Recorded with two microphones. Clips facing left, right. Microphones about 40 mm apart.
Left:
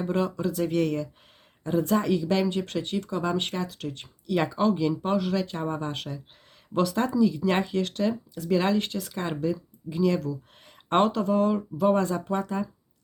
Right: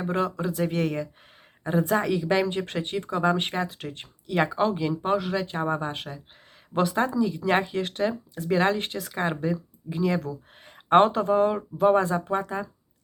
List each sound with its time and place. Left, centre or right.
0.0 s speech: centre
2.0 s speech: right
4.4 s speech: centre; by 9.1 s right
9.4 s speech: right